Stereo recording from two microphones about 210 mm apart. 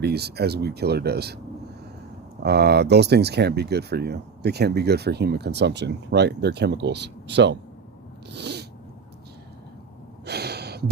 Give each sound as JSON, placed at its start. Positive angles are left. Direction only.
{"t": 0.0, "sound": "speech", "side_deg": -50}
{"t": 2.4, "sound": "speech", "side_deg": -50}
{"t": 8.3, "sound": "sneeze", "side_deg": -55}
{"t": 10.2, "sound": "gasp", "side_deg": -50}